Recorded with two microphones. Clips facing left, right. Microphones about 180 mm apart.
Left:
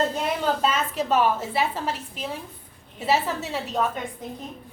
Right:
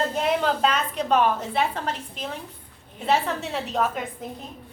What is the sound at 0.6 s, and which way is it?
A woman's voice, 5° left (ahead or behind).